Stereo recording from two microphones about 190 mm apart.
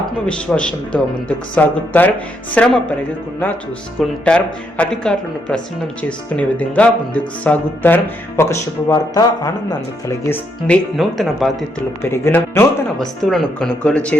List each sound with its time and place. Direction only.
0.3 s speech: 5° left (ahead or behind)
4.3 s speech: 5° left (ahead or behind)
10.9 s speech: centre (ahead or behind)
12.0 s speech: 10° left (ahead or behind)